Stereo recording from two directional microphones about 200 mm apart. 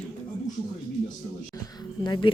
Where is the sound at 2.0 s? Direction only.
20° left (ahead or behind).